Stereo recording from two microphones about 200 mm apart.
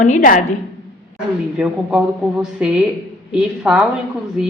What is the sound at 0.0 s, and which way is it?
Speech, 40° left (ahead or behind).